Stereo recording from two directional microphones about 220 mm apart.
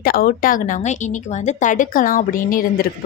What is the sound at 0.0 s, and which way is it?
Speech, 40° left (ahead or behind).